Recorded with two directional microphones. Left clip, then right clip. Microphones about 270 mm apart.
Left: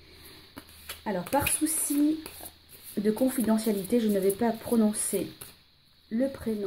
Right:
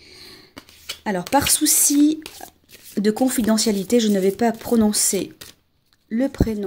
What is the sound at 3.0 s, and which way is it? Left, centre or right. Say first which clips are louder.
Speech: right 7 dB; right.